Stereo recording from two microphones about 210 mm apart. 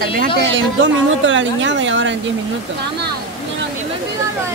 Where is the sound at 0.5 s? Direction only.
65° right (ahead or behind).